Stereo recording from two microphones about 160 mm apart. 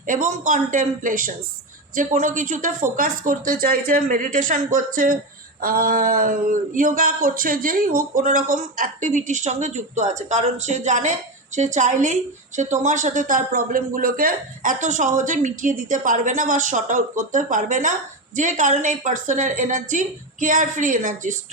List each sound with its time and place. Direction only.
0.0 s speech: 55° right (ahead or behind)